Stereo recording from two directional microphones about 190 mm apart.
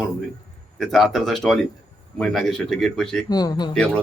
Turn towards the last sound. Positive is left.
turn(degrees=5)  # may be behind; listen again after turning